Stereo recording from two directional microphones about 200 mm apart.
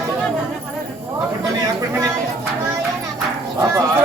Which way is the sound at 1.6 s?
15° right (ahead or behind).